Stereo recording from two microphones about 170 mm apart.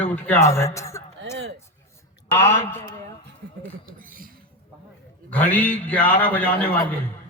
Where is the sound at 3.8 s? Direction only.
55° right (ahead or behind).